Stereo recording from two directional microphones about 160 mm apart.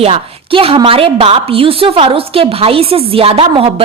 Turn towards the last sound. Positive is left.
turn(degrees=-35)  # may be behind; listen again after turning